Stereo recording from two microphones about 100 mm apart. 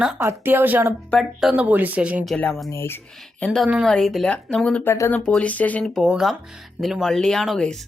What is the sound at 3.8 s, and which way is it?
Speech, 5° left (ahead or behind).